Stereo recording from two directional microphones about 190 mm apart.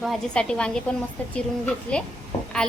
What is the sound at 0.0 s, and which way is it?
A woman's voice, centre (ahead or behind).